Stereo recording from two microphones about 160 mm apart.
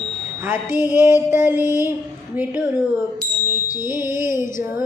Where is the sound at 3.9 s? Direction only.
15° right (ahead or behind).